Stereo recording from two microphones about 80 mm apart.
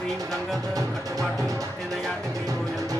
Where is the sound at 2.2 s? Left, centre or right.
Right.